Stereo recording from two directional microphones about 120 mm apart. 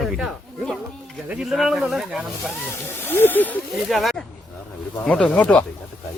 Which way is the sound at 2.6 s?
20° left (ahead or behind).